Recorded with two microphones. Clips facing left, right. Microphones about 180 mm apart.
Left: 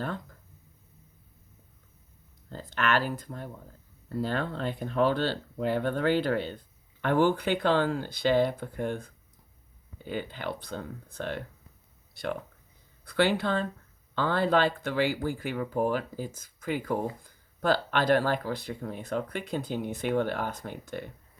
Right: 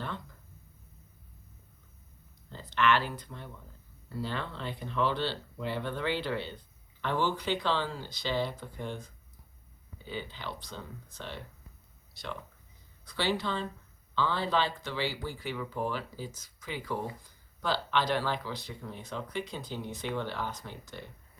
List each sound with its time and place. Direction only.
2.5 s speech: 45° left (ahead or behind)